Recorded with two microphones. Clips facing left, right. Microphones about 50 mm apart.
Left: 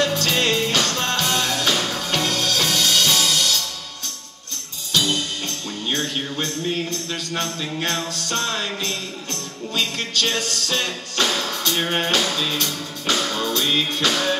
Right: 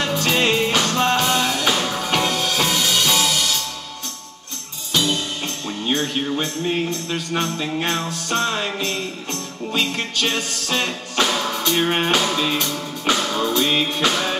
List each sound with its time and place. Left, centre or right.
0.0 s music: centre
4.9 s music: centre